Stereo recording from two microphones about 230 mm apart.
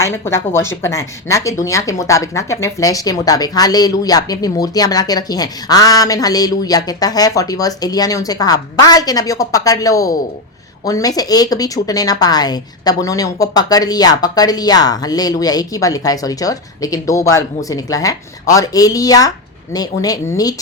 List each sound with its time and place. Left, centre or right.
0.0 s speech: centre